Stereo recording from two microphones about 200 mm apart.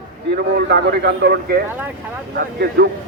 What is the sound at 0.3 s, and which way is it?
A man's voice, 55° right (ahead or behind).